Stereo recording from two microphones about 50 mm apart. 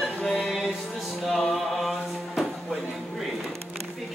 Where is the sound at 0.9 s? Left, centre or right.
Centre.